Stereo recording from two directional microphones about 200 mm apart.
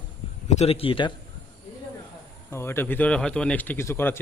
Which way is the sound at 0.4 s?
35° left (ahead or behind).